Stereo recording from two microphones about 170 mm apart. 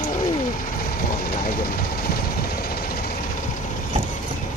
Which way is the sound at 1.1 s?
55° left (ahead or behind).